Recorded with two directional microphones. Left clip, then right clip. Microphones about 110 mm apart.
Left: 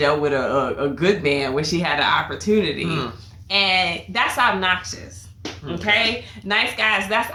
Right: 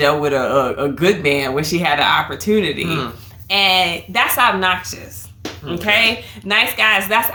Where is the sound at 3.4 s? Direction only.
40° right (ahead or behind).